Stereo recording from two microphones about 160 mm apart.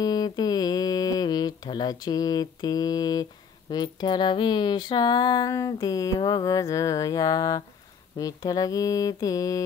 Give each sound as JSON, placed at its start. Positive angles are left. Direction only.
{"t": 0.0, "sound": "mantra", "side_deg": 25}
{"t": 3.7, "sound": "speech", "side_deg": 25}